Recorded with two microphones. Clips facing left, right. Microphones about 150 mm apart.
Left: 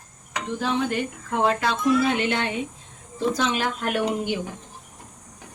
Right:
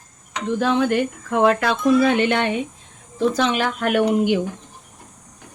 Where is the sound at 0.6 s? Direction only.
80° right.